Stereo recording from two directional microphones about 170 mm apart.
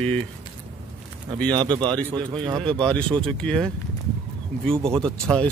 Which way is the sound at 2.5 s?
5° left (ahead or behind).